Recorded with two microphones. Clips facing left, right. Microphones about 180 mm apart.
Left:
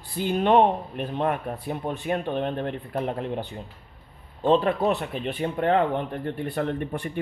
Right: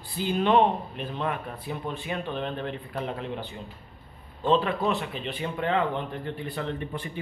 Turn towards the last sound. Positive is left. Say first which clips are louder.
# left 4 dB
turn(degrees=55)  # may be behind; listen again after turning